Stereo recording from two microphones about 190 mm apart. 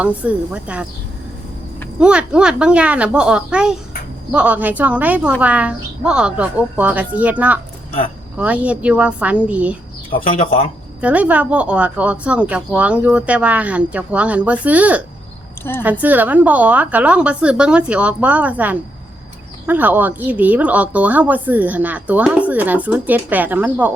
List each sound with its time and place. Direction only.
0.0 s a woman's voice: 5° right (ahead or behind)
2.0 s a woman's voice: 5° right (ahead or behind)
10.4 s speech: 30° left (ahead or behind)
11.0 s a woman's voice: 5° right (ahead or behind)